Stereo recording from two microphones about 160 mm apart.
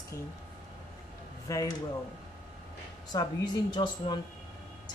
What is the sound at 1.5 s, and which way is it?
Speech, 20° left (ahead or behind).